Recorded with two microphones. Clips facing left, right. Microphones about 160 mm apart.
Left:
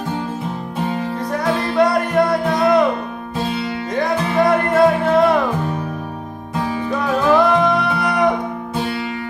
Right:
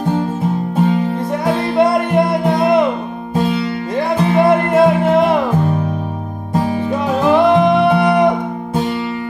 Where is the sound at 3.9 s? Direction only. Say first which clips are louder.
Right 3 dB; 30° right (ahead or behind).